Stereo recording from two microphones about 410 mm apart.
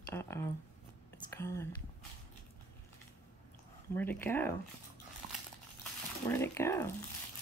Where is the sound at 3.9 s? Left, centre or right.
Centre.